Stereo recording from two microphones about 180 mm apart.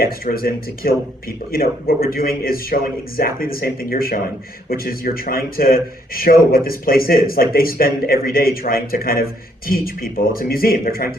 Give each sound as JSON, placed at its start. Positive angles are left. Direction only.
{"t": 0.0, "sound": "a man's voice", "side_deg": 55}